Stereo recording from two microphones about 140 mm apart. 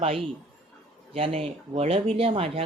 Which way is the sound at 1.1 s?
40° right (ahead or behind).